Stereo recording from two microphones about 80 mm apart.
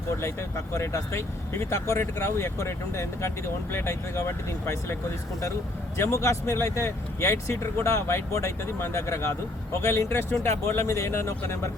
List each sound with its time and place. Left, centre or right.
0.2 s speech: left
6.0 s speech: left